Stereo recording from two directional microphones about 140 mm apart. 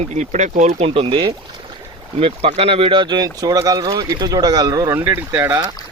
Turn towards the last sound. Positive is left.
turn(degrees=-20)  # may be behind; listen again after turning